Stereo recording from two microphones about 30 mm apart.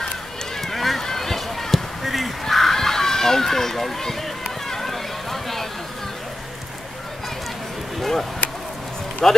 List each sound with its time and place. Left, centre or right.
0.6 s run: centre
1.0 s basketball bounce: centre
2.4 s a sound: centre
4.6 s run: centre
8.0 s a sound: centre
9.2 s speech: centre